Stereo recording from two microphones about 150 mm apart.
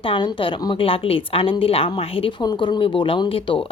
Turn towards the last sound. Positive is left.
turn(degrees=35)  # may be behind; listen again after turning